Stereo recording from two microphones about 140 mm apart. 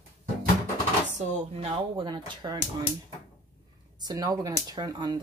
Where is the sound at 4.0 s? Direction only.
30° right (ahead or behind).